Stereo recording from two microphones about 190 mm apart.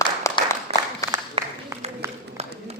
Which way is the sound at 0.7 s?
35° right (ahead or behind).